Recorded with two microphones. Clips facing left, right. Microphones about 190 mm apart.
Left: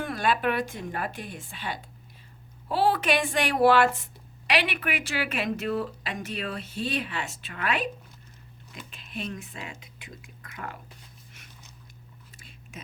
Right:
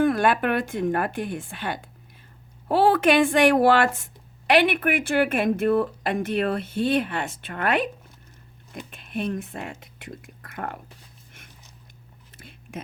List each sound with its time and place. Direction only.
0.0 s a woman's voice: 55° right (ahead or behind)
8.9 s a woman's voice: 55° right (ahead or behind)
12.4 s whispering: 55° right (ahead or behind)